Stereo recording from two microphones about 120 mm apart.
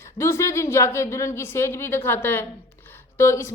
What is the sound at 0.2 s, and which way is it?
A woman's voice, 20° left (ahead or behind).